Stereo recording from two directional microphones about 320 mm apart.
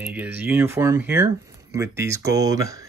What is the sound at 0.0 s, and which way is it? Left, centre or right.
Speech, centre.